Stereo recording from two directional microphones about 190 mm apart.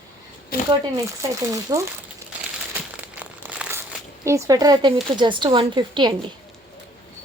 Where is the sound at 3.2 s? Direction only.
5° right (ahead or behind).